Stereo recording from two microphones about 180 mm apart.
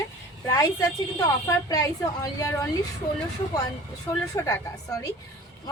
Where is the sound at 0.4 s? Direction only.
20° left (ahead or behind).